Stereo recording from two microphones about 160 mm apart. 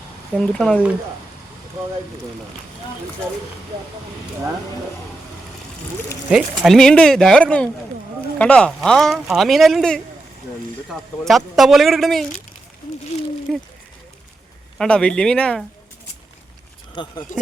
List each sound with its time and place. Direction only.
0.3 s speech: 5° left (ahead or behind)
6.3 s speech: centre (ahead or behind)
13.5 s speech: centre (ahead or behind)
14.8 s speech: 5° left (ahead or behind)
16.9 s speech: 30° left (ahead or behind)